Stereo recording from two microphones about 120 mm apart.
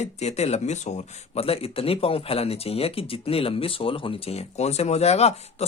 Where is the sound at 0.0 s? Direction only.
65° left (ahead or behind).